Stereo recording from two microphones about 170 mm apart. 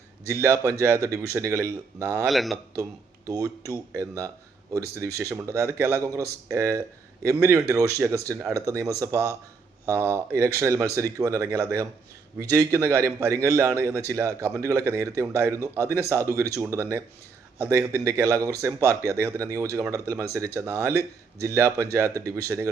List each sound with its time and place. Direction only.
0.3 s speech: 15° right (ahead or behind)
2.2 s a man's voice: centre (ahead or behind)
3.2 s speech: 20° right (ahead or behind)